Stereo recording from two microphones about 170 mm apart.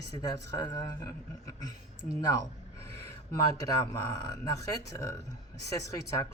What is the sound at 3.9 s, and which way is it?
Speech, 20° left (ahead or behind).